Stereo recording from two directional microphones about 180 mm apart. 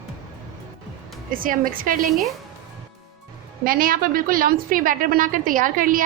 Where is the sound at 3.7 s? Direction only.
55° right (ahead or behind).